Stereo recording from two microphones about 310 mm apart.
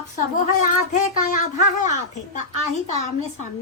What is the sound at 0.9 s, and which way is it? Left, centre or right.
A woman's voice, left.